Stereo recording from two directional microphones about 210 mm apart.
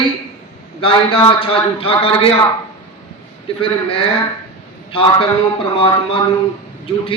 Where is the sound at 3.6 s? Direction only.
25° left (ahead or behind).